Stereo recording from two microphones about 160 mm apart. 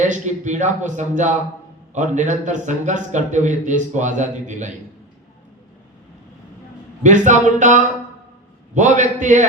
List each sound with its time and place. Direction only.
0.0 s speech: 50° right (ahead or behind)
7.0 s speech: 50° right (ahead or behind)